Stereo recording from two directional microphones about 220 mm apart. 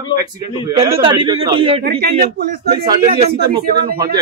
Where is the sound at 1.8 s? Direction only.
45° right (ahead or behind).